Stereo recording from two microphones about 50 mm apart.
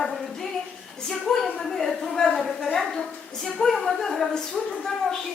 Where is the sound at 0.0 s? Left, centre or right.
Centre.